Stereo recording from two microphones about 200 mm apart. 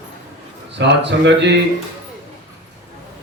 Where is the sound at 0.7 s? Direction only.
60° right (ahead or behind).